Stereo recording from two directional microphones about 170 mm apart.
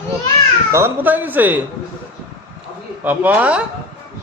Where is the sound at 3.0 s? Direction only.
10° right (ahead or behind).